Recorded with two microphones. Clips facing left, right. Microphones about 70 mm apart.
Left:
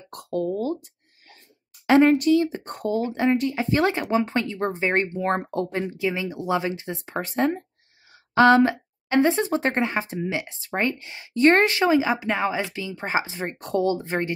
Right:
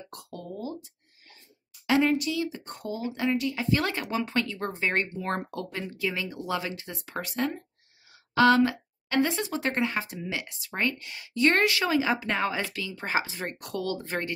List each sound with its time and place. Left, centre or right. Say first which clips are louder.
0.1 s a sound: left 15 dB; left
1.9 s speech: left 8 dB; left
5.9 s speech: left 5 dB; left
12.0 s speech: left 3 dB; centre